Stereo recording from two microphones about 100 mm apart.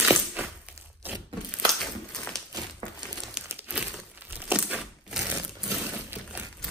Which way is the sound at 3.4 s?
15° right (ahead or behind).